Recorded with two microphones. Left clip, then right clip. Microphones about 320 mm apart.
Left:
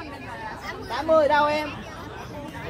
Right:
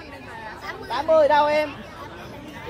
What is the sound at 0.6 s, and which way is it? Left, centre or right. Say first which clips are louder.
Speech: right 2 dB; right.